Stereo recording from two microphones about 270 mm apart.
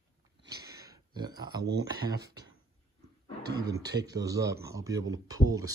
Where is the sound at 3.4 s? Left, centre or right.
Right.